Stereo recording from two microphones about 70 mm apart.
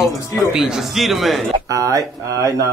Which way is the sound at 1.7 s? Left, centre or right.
Right.